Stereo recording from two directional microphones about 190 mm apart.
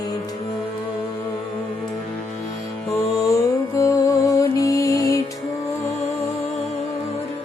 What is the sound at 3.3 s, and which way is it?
Music, 15° left (ahead or behind).